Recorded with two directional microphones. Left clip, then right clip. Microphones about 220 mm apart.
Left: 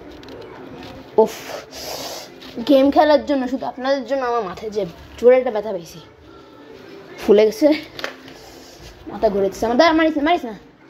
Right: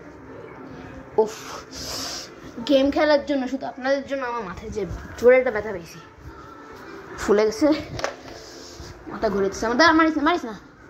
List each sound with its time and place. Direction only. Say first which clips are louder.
1.1 s speech: left 6 dB; 45° left (ahead or behind)
5.2 s speech: left 3 dB; 30° left (ahead or behind)
7.2 s speech: left 6 dB; 40° left (ahead or behind)
9.2 s speech: left 5 dB; 30° left (ahead or behind)